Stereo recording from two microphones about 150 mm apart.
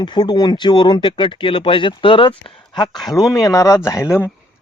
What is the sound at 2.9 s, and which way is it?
Speech, centre (ahead or behind).